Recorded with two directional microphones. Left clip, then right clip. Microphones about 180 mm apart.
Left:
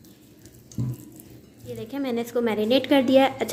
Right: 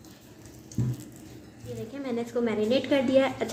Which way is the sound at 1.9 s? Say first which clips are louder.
Left 5 dB; 50° left (ahead or behind).